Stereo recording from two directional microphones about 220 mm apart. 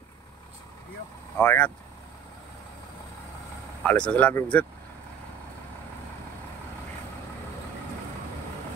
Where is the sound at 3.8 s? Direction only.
5° left (ahead or behind).